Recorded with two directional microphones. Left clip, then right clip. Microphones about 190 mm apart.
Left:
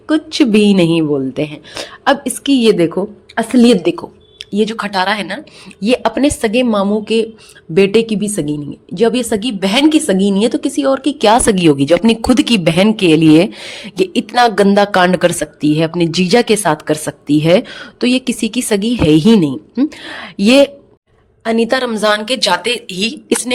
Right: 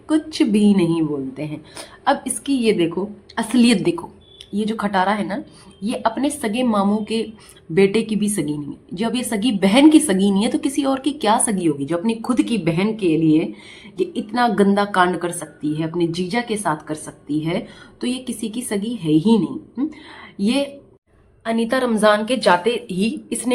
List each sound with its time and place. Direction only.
0.1 s a woman's voice: 40° left (ahead or behind)
21.4 s a woman's voice: 35° left (ahead or behind); by 23.1 s 50° left (ahead or behind)